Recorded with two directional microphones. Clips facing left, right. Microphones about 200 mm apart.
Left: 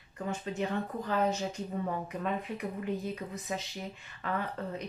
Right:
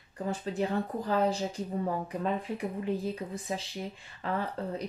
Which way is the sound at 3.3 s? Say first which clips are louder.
Right 2 dB; 30° right (ahead or behind).